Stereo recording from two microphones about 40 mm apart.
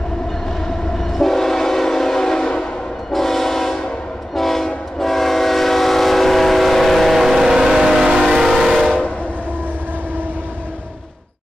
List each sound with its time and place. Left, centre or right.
0.9 s train: centre
3.1 s train: centre